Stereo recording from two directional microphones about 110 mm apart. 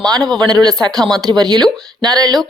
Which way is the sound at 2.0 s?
40° right (ahead or behind).